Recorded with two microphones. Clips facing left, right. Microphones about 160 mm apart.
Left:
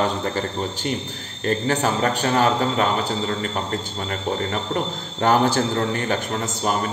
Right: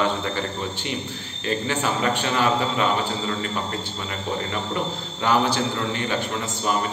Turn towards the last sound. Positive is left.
turn(degrees=45)  # may be behind; listen again after turning